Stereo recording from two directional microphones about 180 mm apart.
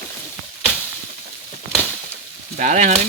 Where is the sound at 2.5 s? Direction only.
45° right (ahead or behind).